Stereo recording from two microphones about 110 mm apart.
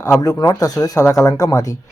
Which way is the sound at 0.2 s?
35° left (ahead or behind).